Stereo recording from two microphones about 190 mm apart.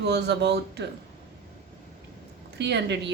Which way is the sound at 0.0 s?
60° right (ahead or behind).